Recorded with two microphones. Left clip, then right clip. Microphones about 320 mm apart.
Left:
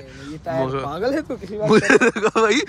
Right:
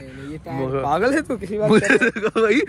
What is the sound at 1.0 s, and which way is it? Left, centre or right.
Speech, right.